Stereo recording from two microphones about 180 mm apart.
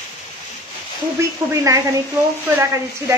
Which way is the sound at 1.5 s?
15° right (ahead or behind).